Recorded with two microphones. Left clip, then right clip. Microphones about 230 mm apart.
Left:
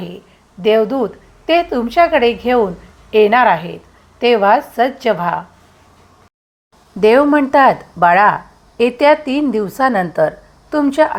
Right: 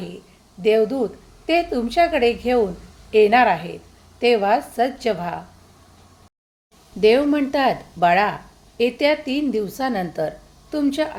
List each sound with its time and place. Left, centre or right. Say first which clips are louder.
0.6 s a woman's voice: left 5 dB; centre
7.0 s a woman's voice: left 6 dB; centre